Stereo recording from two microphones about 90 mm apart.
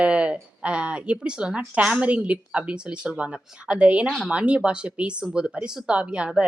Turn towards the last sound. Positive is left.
turn(degrees=-15)  # may be behind; listen again after turning